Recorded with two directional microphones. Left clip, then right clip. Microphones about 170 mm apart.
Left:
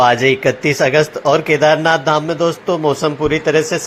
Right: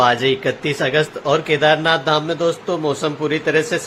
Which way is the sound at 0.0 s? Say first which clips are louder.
Left 4 dB; 20° left (ahead or behind).